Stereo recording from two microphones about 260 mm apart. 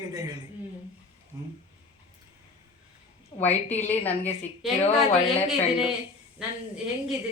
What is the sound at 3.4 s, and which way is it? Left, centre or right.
A man's voice, centre.